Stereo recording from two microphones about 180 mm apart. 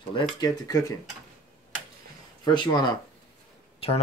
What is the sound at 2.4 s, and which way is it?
Speech, 25° left (ahead or behind).